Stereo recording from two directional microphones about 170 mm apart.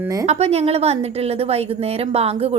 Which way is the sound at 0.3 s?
40° right (ahead or behind).